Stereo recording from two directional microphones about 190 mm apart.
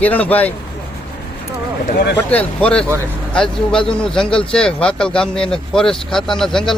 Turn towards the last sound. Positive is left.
turn(degrees=0)  # may be behind; listen again after turning